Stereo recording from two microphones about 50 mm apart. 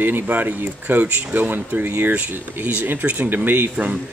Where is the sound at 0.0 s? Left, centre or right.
Right.